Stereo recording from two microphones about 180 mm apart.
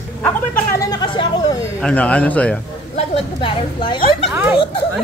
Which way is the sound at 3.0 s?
30° left (ahead or behind).